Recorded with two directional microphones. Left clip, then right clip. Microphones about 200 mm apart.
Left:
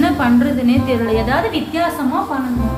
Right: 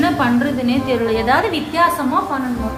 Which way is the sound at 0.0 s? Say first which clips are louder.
Left 1 dB; 10° right (ahead or behind).